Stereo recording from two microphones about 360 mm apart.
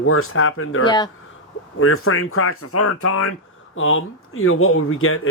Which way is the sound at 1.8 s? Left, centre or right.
Left.